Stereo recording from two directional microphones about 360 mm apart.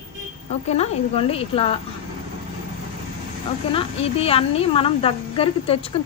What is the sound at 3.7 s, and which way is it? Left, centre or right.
A woman's voice, centre.